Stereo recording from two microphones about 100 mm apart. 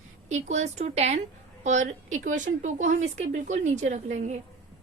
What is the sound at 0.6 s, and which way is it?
Speech, 90° right.